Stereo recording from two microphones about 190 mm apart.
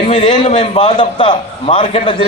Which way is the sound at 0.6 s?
25° left (ahead or behind).